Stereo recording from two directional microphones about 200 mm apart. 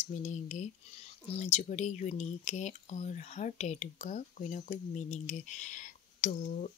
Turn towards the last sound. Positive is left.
turn(degrees=40)  # may be behind; listen again after turning